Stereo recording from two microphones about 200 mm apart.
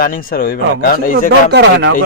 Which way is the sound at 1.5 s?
60° right (ahead or behind).